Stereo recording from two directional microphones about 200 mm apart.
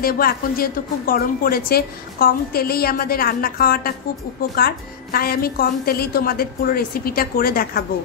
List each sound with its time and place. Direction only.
0.0 s a woman's voice: 50° left (ahead or behind)